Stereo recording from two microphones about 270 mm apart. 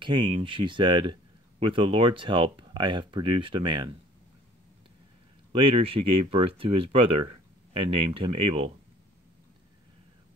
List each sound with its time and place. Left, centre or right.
0.0 s speech: centre
5.5 s speech: centre